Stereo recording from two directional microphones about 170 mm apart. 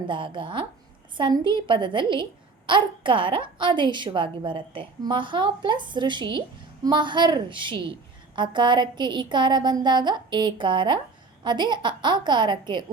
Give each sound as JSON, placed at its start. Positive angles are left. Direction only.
{"t": 0.1, "sound": "a woman's voice", "side_deg": -30}